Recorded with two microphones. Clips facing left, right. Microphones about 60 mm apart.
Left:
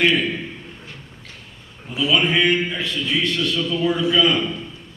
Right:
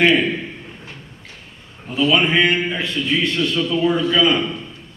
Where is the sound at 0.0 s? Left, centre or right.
Right.